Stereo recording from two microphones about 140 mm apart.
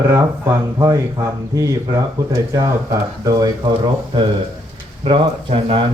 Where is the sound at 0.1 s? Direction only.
20° right (ahead or behind).